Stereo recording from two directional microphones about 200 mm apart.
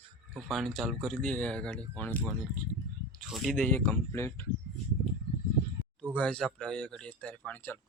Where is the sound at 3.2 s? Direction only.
Centre (ahead or behind).